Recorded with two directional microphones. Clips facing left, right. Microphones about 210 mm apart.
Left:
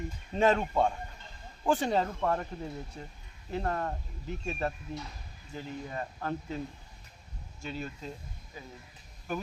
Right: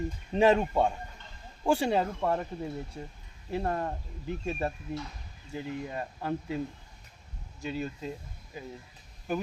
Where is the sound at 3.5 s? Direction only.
15° right (ahead or behind).